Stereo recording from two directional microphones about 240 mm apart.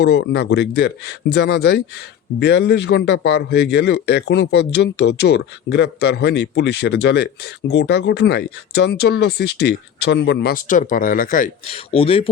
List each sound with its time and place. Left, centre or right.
0.0 s a man's voice: left